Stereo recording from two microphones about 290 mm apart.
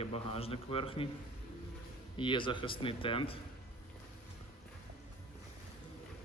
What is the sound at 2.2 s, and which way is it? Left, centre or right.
Speech, centre.